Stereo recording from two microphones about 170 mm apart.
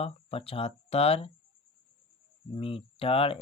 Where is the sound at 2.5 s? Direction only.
35° left (ahead or behind).